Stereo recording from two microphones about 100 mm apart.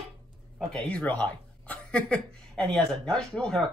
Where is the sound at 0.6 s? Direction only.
5° left (ahead or behind).